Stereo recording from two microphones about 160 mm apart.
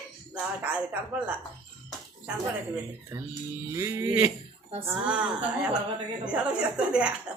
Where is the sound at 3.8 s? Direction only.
20° right (ahead or behind).